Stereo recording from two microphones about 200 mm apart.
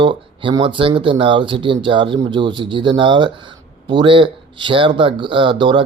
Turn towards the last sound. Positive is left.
turn(degrees=-25)  # may be behind; listen again after turning